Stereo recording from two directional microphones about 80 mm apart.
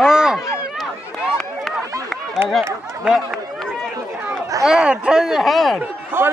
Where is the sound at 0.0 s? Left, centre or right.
Centre.